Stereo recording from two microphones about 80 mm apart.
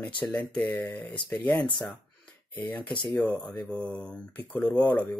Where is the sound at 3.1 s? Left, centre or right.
Left.